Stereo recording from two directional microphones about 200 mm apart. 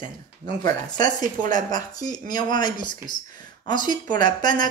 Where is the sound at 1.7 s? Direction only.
20° left (ahead or behind).